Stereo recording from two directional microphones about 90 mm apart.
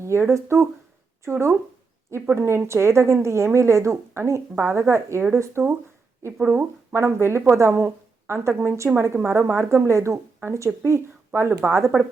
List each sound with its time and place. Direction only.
0.0 s a woman's voice: 30° right (ahead or behind)